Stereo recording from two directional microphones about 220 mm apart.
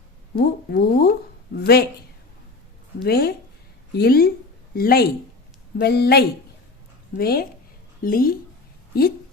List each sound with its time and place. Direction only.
0.3 s speech: 45° left (ahead or behind)
3.0 s speech: 45° left (ahead or behind)